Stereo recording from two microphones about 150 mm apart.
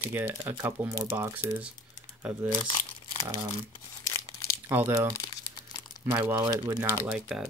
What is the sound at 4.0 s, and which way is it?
Crumpling, 20° left (ahead or behind).